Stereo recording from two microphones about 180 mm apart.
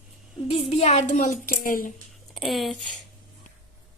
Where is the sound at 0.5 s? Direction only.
35° left (ahead or behind).